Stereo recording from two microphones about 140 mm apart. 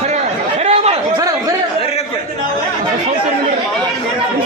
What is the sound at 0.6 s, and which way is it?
Chatter, 50° right (ahead or behind).